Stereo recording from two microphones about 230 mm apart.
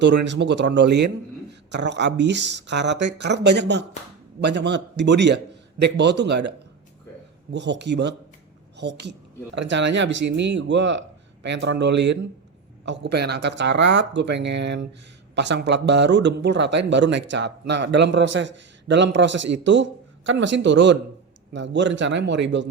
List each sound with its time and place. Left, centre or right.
0.0 s speech: right
7.5 s a woman's voice: right